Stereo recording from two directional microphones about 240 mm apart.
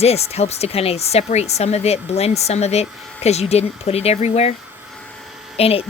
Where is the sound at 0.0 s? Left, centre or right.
Left.